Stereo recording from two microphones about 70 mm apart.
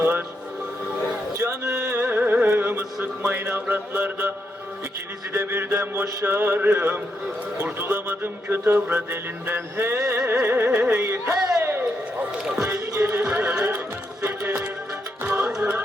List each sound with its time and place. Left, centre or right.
0.0 s speech: right
1.4 s a sound: right
5.3 s speech: right
10.4 s music: right
10.8 s speech: right
11.6 s a sound: right
12.6 s music: right
15.4 s music: centre